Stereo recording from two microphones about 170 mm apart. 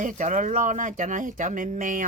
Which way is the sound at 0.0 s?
50° right (ahead or behind).